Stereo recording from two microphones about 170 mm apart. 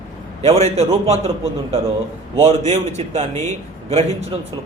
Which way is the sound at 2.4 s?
40° right (ahead or behind).